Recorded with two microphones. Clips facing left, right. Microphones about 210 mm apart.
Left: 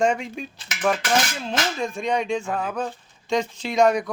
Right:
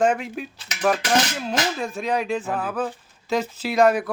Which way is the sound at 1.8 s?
5° right (ahead or behind).